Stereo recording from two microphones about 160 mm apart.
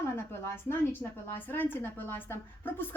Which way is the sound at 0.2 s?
15° left (ahead or behind).